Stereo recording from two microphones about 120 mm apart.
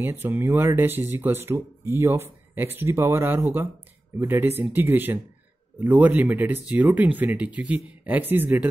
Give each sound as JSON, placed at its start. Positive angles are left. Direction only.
{"t": 0.0, "sound": "speech", "side_deg": -20}